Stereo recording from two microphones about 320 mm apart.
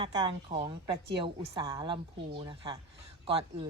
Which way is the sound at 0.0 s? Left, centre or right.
Centre.